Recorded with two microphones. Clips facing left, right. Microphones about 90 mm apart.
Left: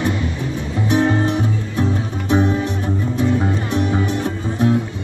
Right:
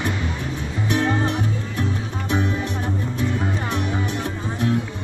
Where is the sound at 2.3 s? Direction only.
25° left (ahead or behind).